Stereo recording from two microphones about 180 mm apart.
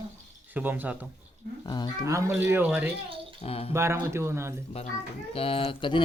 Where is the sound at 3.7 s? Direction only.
15° right (ahead or behind).